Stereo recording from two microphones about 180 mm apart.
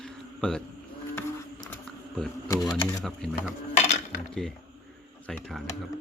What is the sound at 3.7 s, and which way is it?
Cutlery, 40° left (ahead or behind).